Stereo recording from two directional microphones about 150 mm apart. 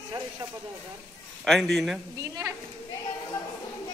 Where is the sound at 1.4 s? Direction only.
Centre (ahead or behind).